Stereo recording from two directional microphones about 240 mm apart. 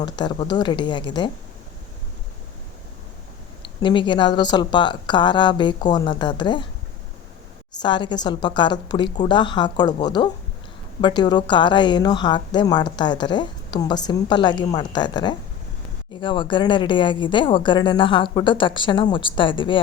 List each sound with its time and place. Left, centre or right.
0.0 s a woman's voice: centre
3.6 s a woman's voice: centre
7.7 s a woman's voice: centre